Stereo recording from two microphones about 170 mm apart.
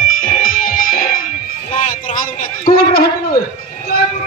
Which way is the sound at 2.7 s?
30° left (ahead or behind).